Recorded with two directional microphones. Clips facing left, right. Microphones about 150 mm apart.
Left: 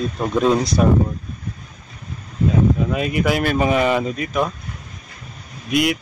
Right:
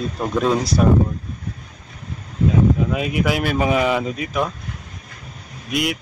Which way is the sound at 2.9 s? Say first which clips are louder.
Left 1 dB; 5° right (ahead or behind).